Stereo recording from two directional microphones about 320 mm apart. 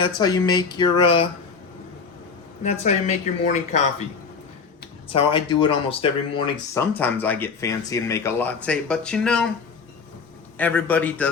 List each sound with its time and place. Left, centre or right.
0.2 s speech: centre
2.6 s speech: left
5.0 s speech: centre
10.6 s speech: centre